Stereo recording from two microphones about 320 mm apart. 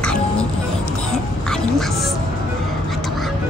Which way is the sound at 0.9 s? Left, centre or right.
Centre.